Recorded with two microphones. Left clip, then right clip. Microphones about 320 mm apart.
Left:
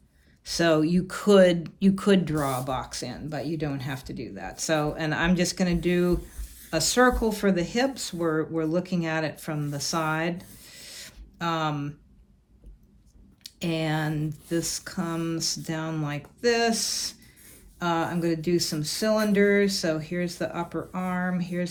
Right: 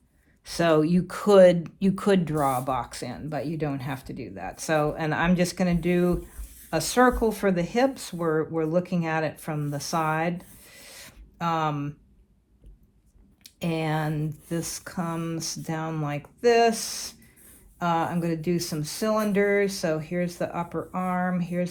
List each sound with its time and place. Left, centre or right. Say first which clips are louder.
0.4 s speech: right 1 dB; centre
13.4 s speech: even; centre